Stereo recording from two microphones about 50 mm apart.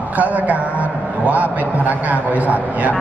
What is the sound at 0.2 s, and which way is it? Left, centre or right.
A man's voice, right.